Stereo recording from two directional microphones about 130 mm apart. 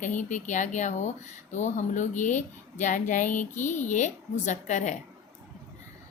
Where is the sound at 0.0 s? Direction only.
70° left (ahead or behind).